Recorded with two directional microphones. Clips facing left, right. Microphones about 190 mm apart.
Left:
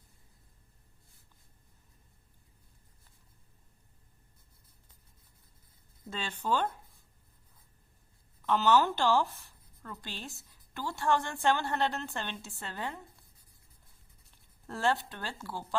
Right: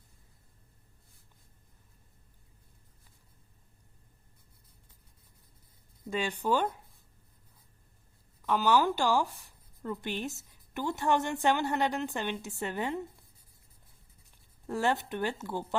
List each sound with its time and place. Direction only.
6.1 s a woman's voice: 15° right (ahead or behind)
8.4 s a woman's voice: 10° right (ahead or behind)
14.3 s speech: 15° right (ahead or behind)